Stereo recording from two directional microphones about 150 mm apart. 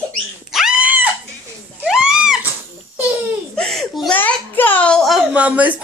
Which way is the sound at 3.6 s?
Centre (ahead or behind).